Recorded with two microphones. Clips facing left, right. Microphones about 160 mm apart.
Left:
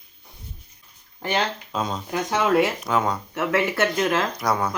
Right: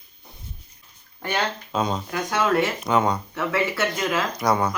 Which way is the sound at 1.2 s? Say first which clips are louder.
Left 2 dB; 20° left (ahead or behind).